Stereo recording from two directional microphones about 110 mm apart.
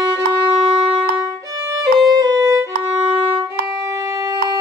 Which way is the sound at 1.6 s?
30° right (ahead or behind).